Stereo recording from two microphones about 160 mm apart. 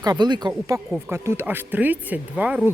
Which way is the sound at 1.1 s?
15° right (ahead or behind).